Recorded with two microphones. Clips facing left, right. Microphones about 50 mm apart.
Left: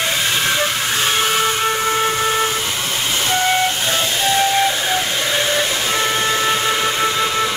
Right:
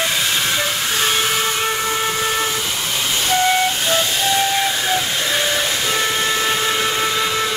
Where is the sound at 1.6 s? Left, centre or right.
Centre.